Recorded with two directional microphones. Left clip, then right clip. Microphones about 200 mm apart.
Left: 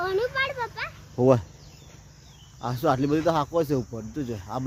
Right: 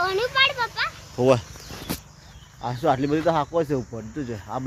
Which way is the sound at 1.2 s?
25° left (ahead or behind).